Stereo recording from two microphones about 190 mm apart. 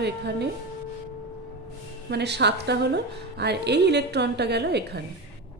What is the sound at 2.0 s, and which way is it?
A woman's voice, 60° right (ahead or behind).